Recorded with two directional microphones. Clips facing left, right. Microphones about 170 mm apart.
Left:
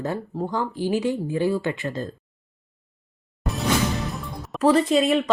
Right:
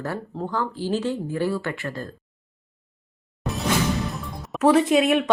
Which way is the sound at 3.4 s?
Centre (ahead or behind).